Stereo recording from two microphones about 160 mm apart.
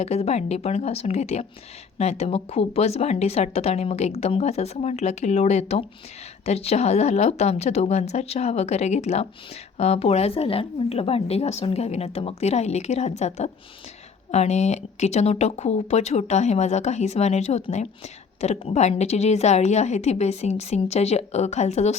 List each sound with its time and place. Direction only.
0.0 s a woman's voice: 40° left (ahead or behind)